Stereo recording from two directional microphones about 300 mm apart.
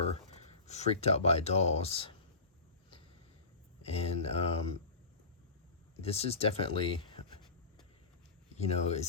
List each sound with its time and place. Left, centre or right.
0.7 s speech: left
3.8 s speech: centre
6.0 s speech: centre
8.5 s speech: left